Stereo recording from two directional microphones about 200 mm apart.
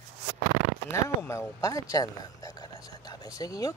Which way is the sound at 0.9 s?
15° left (ahead or behind).